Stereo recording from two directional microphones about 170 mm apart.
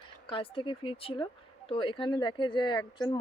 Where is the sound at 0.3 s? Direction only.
30° left (ahead or behind).